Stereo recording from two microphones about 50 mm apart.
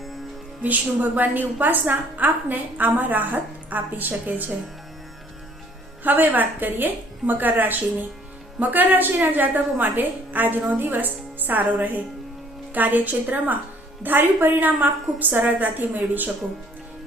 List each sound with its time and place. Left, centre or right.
0.6 s a woman's voice: right
6.0 s a woman's voice: right